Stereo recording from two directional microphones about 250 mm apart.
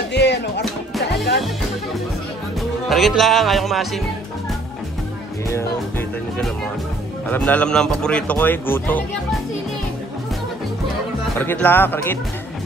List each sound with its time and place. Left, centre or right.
0.1 s music: left
2.9 s a man's voice: centre
5.5 s a man's voice: centre
11.3 s speech: centre